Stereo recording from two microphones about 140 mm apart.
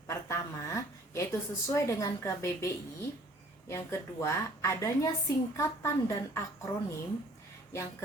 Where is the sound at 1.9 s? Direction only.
20° left (ahead or behind).